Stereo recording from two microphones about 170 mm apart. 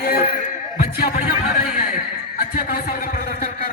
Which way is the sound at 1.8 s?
55° left (ahead or behind).